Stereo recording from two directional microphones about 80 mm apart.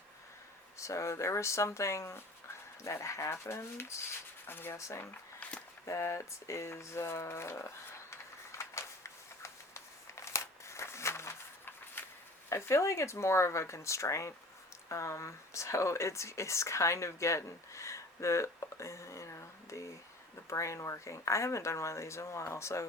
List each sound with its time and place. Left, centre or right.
0.8 s speech: left
5.4 s walk: centre
5.8 s speech: left
8.1 s a sound: left
12.5 s speech: left